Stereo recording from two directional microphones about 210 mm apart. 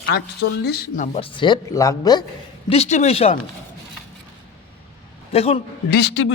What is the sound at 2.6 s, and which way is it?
Speech, 30° left (ahead or behind).